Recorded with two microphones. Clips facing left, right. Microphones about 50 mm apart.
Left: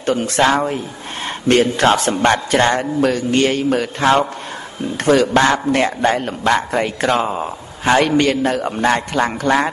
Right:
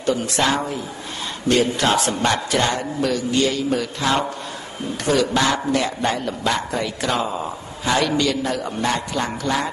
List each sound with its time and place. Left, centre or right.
0.0 s a man's voice: left